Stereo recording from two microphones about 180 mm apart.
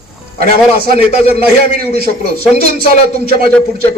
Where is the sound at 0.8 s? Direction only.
55° right (ahead or behind).